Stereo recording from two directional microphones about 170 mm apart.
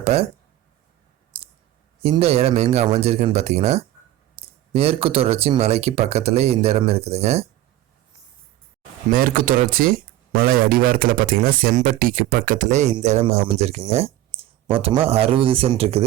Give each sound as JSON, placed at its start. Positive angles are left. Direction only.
{"t": 0.0, "sound": "speech", "side_deg": -40}
{"t": 1.3, "sound": "clicking", "side_deg": -30}
{"t": 2.0, "sound": "speech", "side_deg": -35}
{"t": 9.0, "sound": "speech", "side_deg": -55}